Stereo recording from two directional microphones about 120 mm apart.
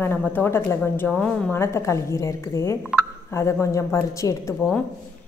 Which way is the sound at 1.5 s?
25° left (ahead or behind).